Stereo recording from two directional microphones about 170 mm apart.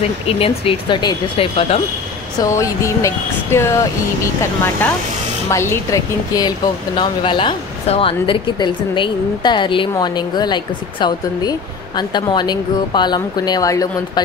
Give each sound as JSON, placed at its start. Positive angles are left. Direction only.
{"t": 0.4, "sound": "speech", "side_deg": 30}
{"t": 2.3, "sound": "a woman's voice", "side_deg": 20}
{"t": 5.5, "sound": "a woman's voice", "side_deg": 15}